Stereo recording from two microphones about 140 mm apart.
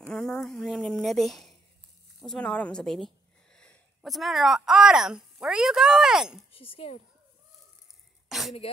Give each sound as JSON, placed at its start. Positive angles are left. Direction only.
{"t": 0.1, "sound": "speech", "side_deg": 5}
{"t": 6.5, "sound": "speech", "side_deg": 40}
{"t": 8.3, "sound": "throat clearing", "side_deg": 0}